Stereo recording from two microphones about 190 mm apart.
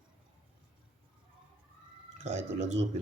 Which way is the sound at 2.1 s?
35° right (ahead or behind).